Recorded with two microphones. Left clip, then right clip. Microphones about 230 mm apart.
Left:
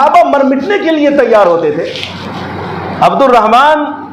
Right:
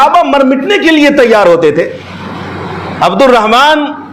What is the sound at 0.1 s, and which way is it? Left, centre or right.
A man's voice, right.